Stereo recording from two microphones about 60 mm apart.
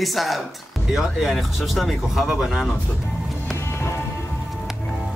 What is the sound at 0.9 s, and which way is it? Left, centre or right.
Speech, centre.